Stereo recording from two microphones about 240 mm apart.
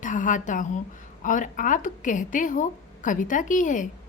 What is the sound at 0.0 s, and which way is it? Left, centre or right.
A woman's voice, left.